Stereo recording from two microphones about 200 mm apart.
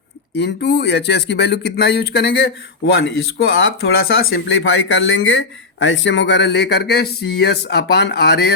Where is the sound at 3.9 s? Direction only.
50° left (ahead or behind).